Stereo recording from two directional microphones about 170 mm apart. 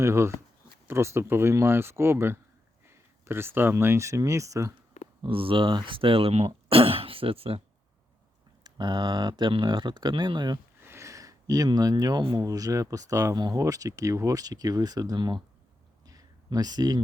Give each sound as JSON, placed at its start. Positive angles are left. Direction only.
{"t": 0.0, "sound": "speech", "side_deg": -15}
{"t": 5.2, "sound": "speech", "side_deg": -30}
{"t": 8.6, "sound": "speech", "side_deg": -25}
{"t": 10.8, "sound": "speech", "side_deg": -15}
{"t": 16.0, "sound": "a sound", "side_deg": -20}